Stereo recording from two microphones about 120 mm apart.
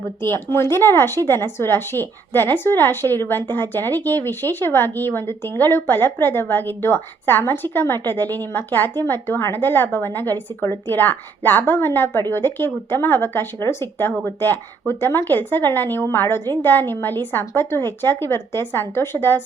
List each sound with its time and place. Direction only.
0.2 s speech: 20° left (ahead or behind)